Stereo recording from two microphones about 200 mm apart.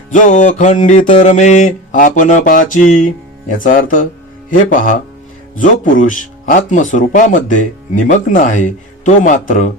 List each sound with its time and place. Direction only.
0.1 s speech: 40° left (ahead or behind)